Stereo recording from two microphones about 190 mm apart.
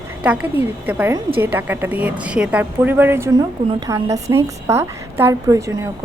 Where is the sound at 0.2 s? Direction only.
5° right (ahead or behind).